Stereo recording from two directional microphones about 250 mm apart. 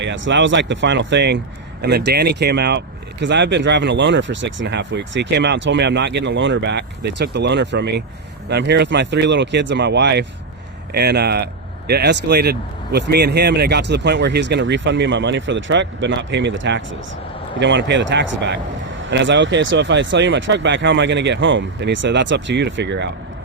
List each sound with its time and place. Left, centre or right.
0.0 s speech: right